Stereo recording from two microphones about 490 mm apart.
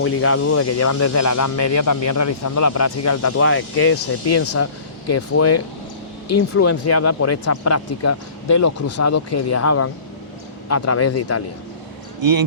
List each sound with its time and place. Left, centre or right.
0.0 s speech: left
12.2 s speech: right